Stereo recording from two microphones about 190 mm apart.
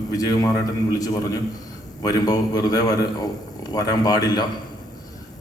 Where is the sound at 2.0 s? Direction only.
20° left (ahead or behind).